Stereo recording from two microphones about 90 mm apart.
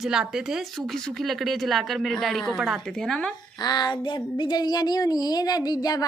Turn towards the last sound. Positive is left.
turn(degrees=45)  # may be behind; listen again after turning